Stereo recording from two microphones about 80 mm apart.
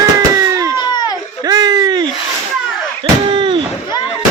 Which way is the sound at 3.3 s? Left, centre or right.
Right.